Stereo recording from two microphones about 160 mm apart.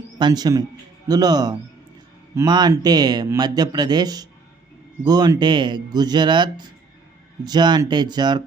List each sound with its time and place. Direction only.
0.2 s speech: 25° right (ahead or behind)